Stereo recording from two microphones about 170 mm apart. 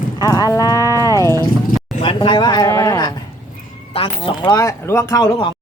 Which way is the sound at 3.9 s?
30° left (ahead or behind).